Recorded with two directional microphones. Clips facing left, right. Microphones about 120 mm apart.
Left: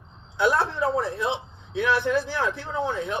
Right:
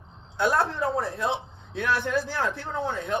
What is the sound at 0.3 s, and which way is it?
A man's voice, 50° right (ahead or behind).